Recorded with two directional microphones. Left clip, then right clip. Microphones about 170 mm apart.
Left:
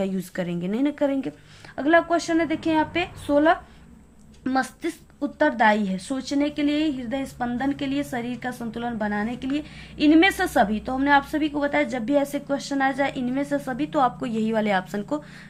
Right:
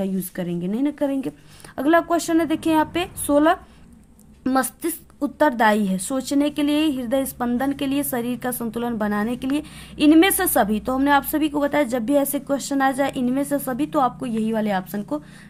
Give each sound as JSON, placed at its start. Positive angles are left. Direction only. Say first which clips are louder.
{"t": 0.0, "sound": "speech", "louder": "even", "side_deg": -20}
{"t": 1.7, "sound": "a woman's voice", "louder": "right 1 dB", "side_deg": -40}